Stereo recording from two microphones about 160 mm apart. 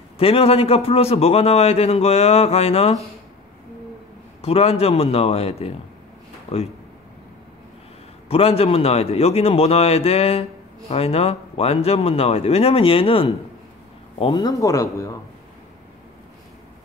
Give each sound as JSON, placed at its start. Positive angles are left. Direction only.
{"t": 0.2, "sound": "a man's voice", "side_deg": 35}
{"t": 4.4, "sound": "a man's voice", "side_deg": 40}
{"t": 8.3, "sound": "a man's voice", "side_deg": 40}